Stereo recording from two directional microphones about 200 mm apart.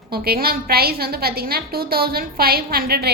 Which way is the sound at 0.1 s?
50° right (ahead or behind).